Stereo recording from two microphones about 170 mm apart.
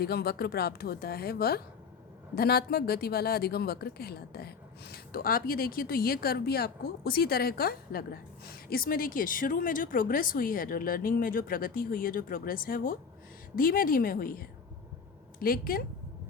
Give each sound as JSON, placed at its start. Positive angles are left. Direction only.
{"t": 0.0, "sound": "speech", "side_deg": 70}